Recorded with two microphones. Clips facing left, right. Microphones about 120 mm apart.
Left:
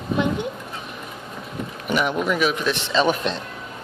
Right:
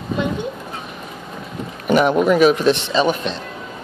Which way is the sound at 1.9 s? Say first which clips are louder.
Right 8 dB; 40° right (ahead or behind).